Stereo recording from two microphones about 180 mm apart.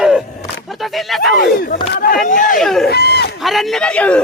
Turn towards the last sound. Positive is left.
turn(degrees=5)  # may be behind; listen again after turning